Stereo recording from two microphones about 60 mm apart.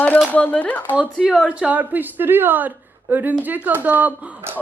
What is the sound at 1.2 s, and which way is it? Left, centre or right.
Speech, centre.